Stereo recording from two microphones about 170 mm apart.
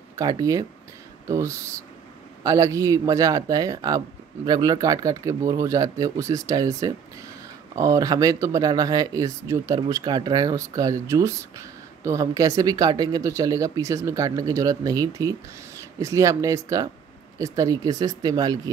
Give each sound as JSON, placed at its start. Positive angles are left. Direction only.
{"t": 0.1, "sound": "speech", "side_deg": -20}